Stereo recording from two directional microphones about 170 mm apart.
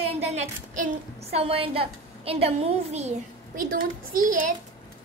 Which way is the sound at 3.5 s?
55° right (ahead or behind).